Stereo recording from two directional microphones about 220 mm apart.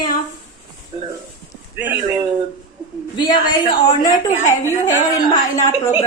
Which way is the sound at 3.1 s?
20° left (ahead or behind).